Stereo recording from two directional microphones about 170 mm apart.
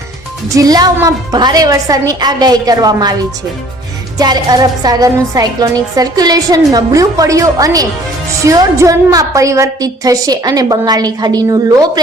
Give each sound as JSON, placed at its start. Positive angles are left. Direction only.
{"t": 0.5, "sound": "a woman's voice", "side_deg": -20}
{"t": 4.2, "sound": "a woman's voice", "side_deg": -25}